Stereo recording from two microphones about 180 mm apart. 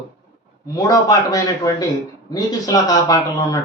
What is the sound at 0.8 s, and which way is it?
A man's voice, 20° left (ahead or behind).